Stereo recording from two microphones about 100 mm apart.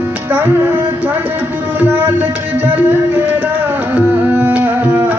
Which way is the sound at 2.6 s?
20° right (ahead or behind).